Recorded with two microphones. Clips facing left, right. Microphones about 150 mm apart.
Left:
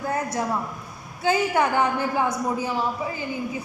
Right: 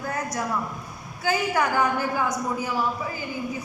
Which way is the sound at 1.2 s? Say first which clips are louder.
Left 3 dB; 25° left (ahead or behind).